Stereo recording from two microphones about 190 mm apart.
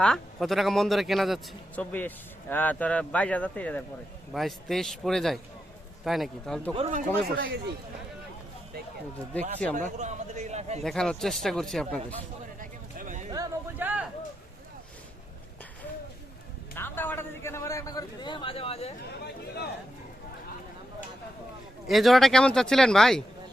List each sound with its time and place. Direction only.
0.0 s a man's voice: centre (ahead or behind)
6.7 s a man's voice: 35° right (ahead or behind)
7.2 s speech: 60° right (ahead or behind)
9.3 s a man's voice: 5° left (ahead or behind)
9.7 s a man's voice: 40° right (ahead or behind)
10.8 s speech: 5° left (ahead or behind)
12.5 s a sound: 45° right (ahead or behind)
13.3 s a sound: 15° right (ahead or behind)
16.7 s a man's voice: 10° left (ahead or behind); by 18.9 s 30° left (ahead or behind)
21.8 s speech: centre (ahead or behind)